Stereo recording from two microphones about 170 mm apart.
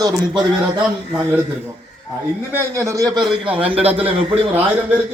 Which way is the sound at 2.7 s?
20° right (ahead or behind).